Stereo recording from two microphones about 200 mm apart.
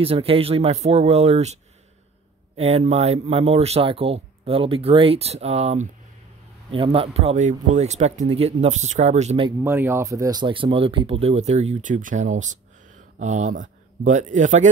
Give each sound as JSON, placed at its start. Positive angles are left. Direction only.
{"t": 0.0, "sound": "speech", "side_deg": -30}
{"t": 9.6, "sound": "speech", "side_deg": -10}